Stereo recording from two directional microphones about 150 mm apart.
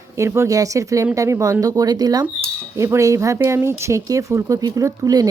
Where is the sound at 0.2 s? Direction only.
20° right (ahead or behind).